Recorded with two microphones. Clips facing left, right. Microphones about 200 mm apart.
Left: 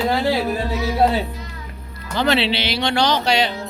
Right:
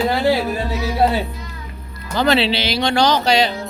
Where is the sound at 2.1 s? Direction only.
40° right (ahead or behind).